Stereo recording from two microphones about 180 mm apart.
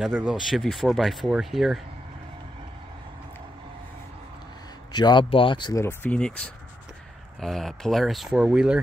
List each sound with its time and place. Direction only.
0.0 s speech: 5° right (ahead or behind)
4.9 s speech: 25° left (ahead or behind); by 8.7 s 5° right (ahead or behind)